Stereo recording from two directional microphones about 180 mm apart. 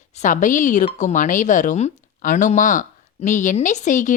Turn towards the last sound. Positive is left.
turn(degrees=45)  # may be behind; listen again after turning